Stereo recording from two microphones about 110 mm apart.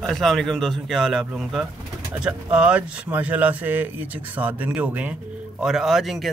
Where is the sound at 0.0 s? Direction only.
5° left (ahead or behind); by 5.1 s 15° right (ahead or behind).